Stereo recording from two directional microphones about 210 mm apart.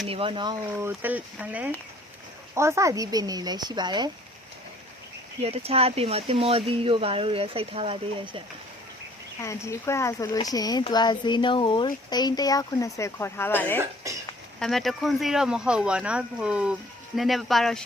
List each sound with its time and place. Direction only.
0.1 s speech: 25° right (ahead or behind)
0.8 s speech: 10° right (ahead or behind)
5.4 s speech: 30° right (ahead or behind)
9.4 s speech: 15° left (ahead or behind)
14.0 s a sound: 15° right (ahead or behind)
14.6 s speech: centre (ahead or behind)